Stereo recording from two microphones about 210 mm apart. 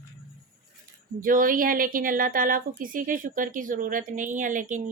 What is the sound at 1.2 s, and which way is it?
A woman's voice, 40° right (ahead or behind).